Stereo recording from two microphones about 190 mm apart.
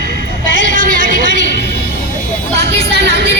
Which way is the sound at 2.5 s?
65° right (ahead or behind).